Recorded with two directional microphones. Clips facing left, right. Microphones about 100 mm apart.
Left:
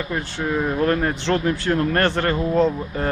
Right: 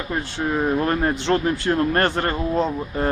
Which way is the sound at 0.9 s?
20° right (ahead or behind).